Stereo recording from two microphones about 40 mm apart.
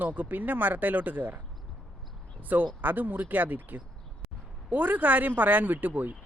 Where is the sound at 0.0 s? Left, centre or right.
Right.